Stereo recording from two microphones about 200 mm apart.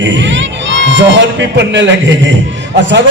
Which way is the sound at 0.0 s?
65° right (ahead or behind).